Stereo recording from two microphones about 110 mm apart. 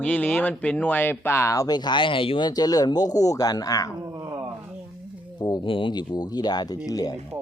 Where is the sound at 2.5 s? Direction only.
35° left (ahead or behind).